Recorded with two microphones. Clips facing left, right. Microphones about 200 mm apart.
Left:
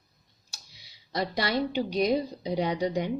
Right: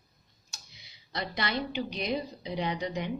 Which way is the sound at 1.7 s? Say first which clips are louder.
Left 7 dB; 40° left (ahead or behind).